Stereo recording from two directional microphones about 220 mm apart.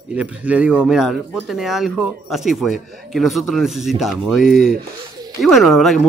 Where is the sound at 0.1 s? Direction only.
5° right (ahead or behind).